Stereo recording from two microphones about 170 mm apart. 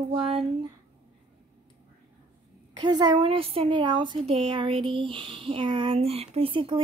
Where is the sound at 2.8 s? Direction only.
25° right (ahead or behind).